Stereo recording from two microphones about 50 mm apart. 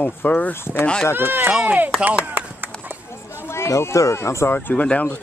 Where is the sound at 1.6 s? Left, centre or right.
Right.